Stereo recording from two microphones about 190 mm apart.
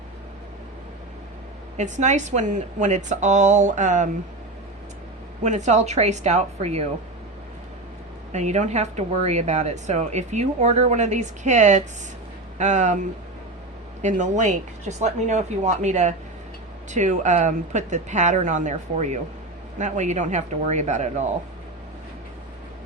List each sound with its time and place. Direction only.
1.7 s speech: 40° right (ahead or behind)
5.4 s speech: 35° right (ahead or behind)
8.3 s speech: 35° right (ahead or behind)
14.0 s speech: 40° right (ahead or behind)